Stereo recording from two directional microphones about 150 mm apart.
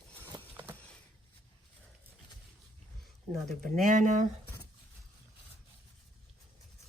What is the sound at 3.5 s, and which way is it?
Speech, 75° right (ahead or behind).